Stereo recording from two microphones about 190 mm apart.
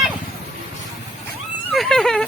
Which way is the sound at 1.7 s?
5° left (ahead or behind).